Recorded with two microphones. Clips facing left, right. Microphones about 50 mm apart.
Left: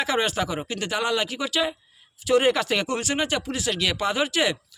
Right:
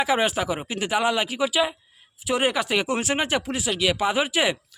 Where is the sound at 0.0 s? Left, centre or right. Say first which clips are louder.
Right 2 dB; centre.